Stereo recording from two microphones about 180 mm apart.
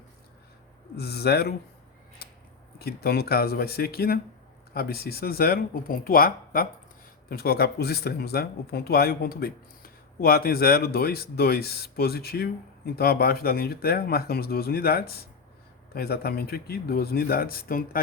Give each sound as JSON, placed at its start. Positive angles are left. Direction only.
{"t": 0.9, "sound": "speech", "side_deg": 60}
{"t": 2.7, "sound": "speech", "side_deg": 60}